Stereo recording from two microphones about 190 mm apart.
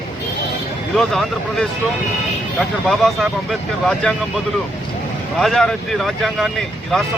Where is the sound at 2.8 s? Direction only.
Centre (ahead or behind).